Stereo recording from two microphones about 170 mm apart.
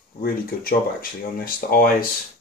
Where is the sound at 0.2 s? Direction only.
60° left (ahead or behind).